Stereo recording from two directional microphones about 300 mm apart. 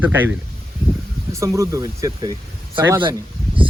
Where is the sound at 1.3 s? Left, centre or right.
Centre.